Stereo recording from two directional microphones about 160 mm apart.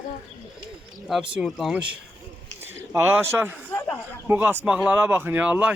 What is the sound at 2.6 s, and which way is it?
Speech, 15° right (ahead or behind).